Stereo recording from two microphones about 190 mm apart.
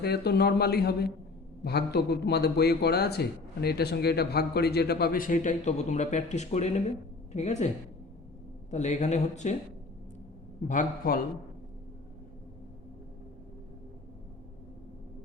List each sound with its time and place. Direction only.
0.0 s a man's voice: 55° left (ahead or behind); by 7.7 s 35° left (ahead or behind)
8.7 s speech: 35° left (ahead or behind)
10.7 s a man's voice: 45° left (ahead or behind)